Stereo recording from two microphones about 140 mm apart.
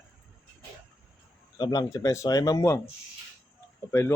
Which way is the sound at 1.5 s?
30° left (ahead or behind).